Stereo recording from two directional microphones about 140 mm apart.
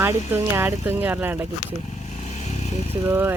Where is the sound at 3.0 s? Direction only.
15° right (ahead or behind).